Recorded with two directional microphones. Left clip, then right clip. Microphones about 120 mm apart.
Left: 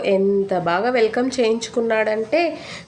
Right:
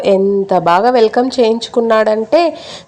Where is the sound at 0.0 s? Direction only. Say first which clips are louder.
Right 6 dB; 55° right (ahead or behind).